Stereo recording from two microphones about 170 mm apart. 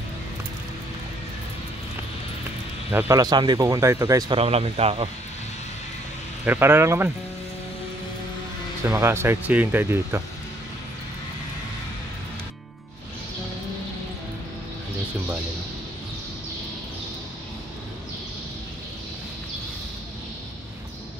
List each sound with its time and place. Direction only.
2.9 s speech: 15° right (ahead or behind)
4.4 s speech: 35° right (ahead or behind)
6.4 s speech: 10° right (ahead or behind)
8.8 s speech: 15° right (ahead or behind)